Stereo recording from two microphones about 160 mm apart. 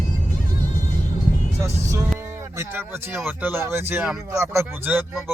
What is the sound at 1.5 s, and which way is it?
Music, 20° right (ahead or behind).